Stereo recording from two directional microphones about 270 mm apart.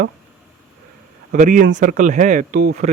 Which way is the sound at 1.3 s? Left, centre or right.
Right.